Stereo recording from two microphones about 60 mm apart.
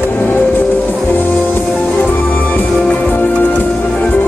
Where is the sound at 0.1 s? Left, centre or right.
Left.